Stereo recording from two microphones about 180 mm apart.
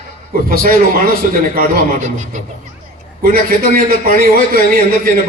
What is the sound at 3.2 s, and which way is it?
A man's voice, 55° right (ahead or behind).